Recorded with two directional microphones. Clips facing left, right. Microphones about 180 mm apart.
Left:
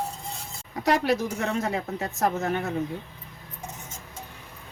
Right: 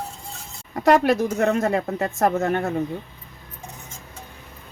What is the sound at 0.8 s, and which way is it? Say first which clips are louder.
A woman's voice: right 6 dB; 50° right (ahead or behind).